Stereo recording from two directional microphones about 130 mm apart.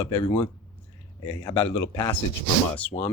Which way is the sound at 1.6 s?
15° left (ahead or behind).